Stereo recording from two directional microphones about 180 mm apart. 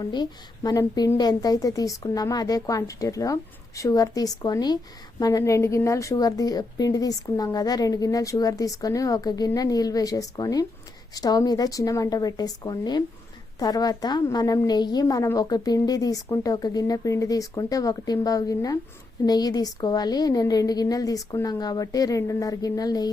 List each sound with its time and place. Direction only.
0.0 s a woman's voice: 25° left (ahead or behind)